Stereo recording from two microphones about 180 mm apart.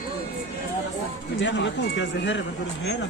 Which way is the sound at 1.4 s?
90° left.